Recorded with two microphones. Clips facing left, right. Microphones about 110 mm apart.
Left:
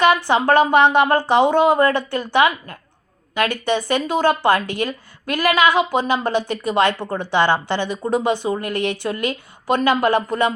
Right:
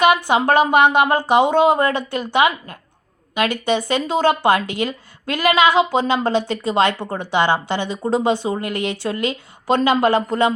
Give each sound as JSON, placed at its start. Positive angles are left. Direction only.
{"t": 0.0, "sound": "speech", "side_deg": -15}